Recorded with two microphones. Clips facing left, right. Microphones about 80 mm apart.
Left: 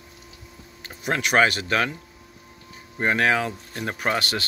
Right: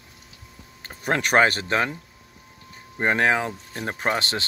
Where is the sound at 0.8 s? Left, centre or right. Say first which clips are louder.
Right 2 dB; right.